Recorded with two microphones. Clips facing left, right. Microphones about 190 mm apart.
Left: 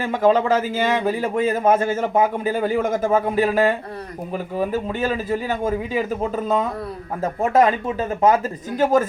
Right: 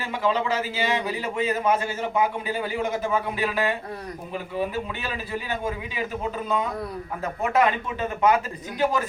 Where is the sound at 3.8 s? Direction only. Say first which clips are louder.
Left 2 dB; centre (ahead or behind).